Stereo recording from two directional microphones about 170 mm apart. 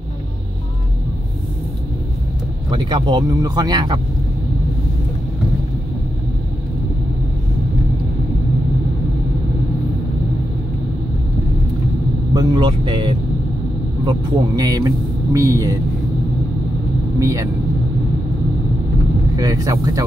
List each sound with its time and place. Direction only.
2.7 s speech: 25° right (ahead or behind)
12.4 s speech: 25° right (ahead or behind)
17.2 s speech: 20° right (ahead or behind)
19.3 s speech: 20° right (ahead or behind)